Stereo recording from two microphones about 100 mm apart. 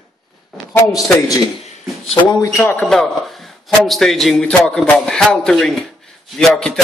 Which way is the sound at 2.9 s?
Centre (ahead or behind).